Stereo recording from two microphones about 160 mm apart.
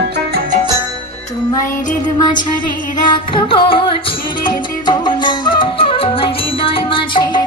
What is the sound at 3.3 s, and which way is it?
Music, 30° left (ahead or behind).